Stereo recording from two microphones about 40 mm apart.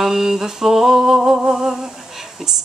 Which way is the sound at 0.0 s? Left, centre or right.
Centre.